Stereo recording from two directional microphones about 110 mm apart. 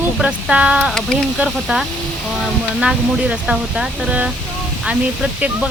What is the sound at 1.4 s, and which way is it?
Speech, 5° right (ahead or behind).